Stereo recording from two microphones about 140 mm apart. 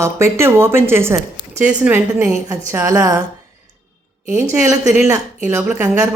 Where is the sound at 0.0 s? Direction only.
20° right (ahead or behind).